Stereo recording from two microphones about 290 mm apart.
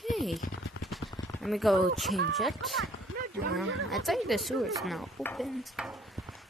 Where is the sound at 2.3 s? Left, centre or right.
Centre.